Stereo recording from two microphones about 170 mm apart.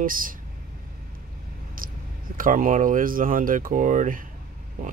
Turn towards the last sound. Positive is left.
turn(degrees=-55)  # may be behind; listen again after turning